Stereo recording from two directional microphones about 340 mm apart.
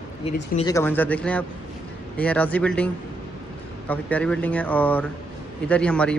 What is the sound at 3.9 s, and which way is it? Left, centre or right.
A man's voice, centre.